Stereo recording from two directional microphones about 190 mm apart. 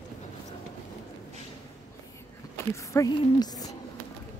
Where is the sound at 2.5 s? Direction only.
15° left (ahead or behind).